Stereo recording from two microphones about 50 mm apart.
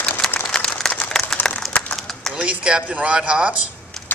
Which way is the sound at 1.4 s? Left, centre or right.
Left.